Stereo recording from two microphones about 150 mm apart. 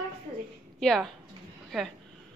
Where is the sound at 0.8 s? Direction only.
Centre (ahead or behind).